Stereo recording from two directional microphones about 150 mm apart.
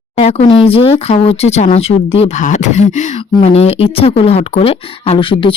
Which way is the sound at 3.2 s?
40° left (ahead or behind).